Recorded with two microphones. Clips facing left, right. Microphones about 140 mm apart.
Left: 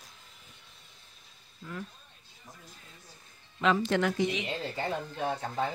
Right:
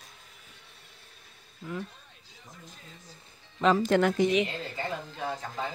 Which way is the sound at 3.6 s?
45° right (ahead or behind).